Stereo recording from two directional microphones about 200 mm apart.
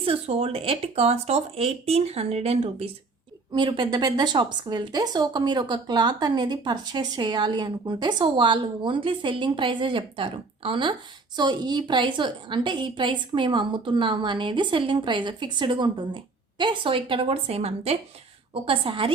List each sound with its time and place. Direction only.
0.0 s a woman's voice: 30° right (ahead or behind)